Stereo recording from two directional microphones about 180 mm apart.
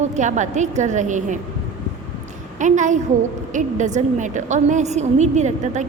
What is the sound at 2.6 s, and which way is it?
A woman's voice, 45° right (ahead or behind).